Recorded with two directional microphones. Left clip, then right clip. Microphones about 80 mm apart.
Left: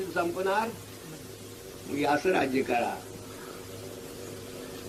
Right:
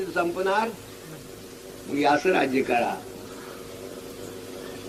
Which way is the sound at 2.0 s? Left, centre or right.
Left.